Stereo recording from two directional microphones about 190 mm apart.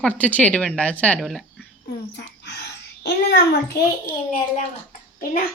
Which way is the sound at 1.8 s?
60° left (ahead or behind).